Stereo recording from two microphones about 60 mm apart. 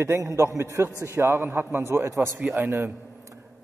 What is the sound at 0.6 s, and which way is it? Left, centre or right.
A man's voice, right.